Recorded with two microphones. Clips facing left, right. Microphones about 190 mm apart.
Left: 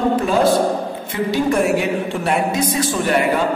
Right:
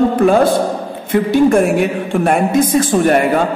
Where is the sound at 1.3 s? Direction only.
50° right (ahead or behind).